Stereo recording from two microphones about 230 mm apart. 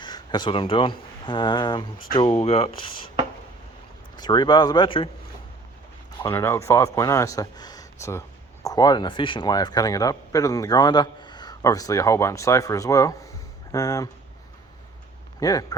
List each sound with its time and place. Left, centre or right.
0.0 s speech: centre
4.2 s speech: centre
6.2 s speech: centre
15.4 s speech: centre